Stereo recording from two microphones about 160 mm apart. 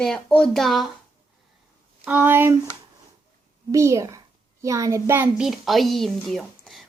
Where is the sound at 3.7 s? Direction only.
20° right (ahead or behind).